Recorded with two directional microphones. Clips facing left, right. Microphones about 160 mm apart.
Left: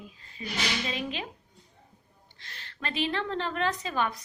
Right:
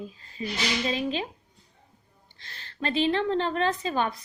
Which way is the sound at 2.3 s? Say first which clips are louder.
Right 6 dB; 35° right (ahead or behind).